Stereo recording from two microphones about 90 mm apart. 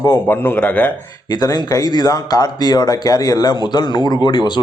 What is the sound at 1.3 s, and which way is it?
Speech, 45° left (ahead or behind).